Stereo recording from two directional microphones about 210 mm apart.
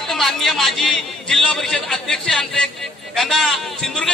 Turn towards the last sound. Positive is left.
turn(degrees=5)  # may be behind; listen again after turning